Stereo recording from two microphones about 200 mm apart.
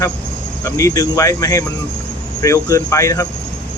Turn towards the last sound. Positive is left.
turn(degrees=15)  # may be behind; listen again after turning